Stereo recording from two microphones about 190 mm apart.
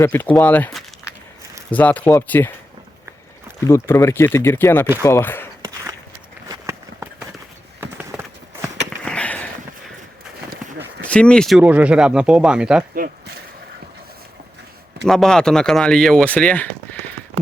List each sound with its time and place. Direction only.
0.0 s speech: 10° left (ahead or behind)
3.6 s speech: 15° left (ahead or behind)
6.5 s run: 15° right (ahead or behind)
8.1 s clip-clop: 5° right (ahead or behind)
9.0 s sniff: 5° left (ahead or behind)
10.5 s run: 65° right (ahead or behind)
11.0 s speech: 5° left (ahead or behind)
12.9 s speech: 50° right (ahead or behind)
15.0 s speech: 5° left (ahead or behind)